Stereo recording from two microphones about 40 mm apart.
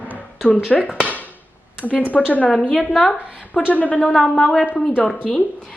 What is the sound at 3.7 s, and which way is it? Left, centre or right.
Speech, left.